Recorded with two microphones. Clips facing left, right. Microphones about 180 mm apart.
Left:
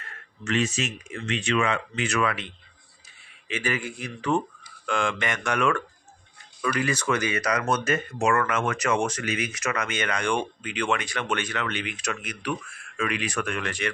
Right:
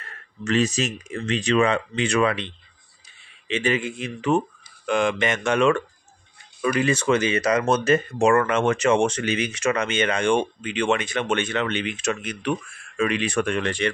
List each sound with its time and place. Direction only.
0.4 s speech: 35° right (ahead or behind)